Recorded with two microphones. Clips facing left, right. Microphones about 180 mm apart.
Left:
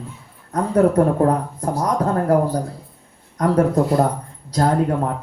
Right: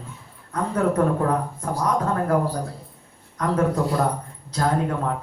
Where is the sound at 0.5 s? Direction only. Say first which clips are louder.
Left 6 dB; 35° left (ahead or behind).